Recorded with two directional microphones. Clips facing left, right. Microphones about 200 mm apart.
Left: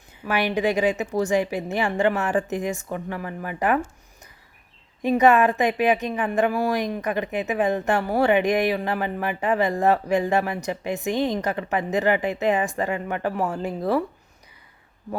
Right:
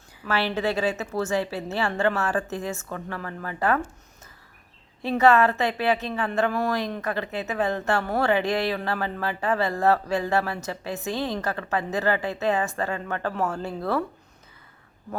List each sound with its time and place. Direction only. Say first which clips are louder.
0.2 s a woman's voice: left 3 dB; 15° left (ahead or behind)
5.0 s a woman's voice: left 2 dB; 15° left (ahead or behind)